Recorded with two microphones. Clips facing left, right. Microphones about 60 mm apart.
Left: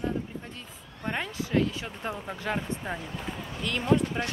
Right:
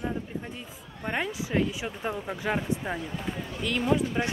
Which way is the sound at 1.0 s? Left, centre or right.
Centre.